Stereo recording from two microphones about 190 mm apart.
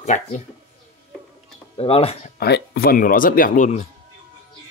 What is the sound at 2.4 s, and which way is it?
Speech, 55° left (ahead or behind).